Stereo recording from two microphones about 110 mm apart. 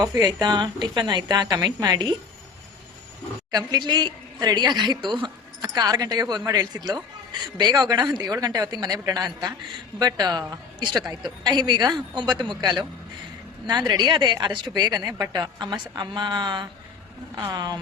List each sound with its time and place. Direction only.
0.0 s a woman's voice: 30° right (ahead or behind)
3.5 s a woman's voice: 40° right (ahead or behind)